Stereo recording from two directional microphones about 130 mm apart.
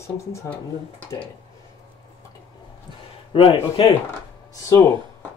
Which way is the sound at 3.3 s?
45° left (ahead or behind).